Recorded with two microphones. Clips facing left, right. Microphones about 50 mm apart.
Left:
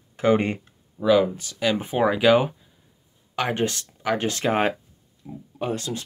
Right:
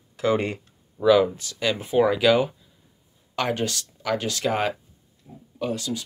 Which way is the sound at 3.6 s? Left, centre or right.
Left.